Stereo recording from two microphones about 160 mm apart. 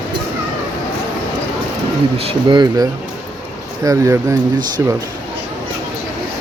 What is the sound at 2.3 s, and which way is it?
Speech, 30° right (ahead or behind).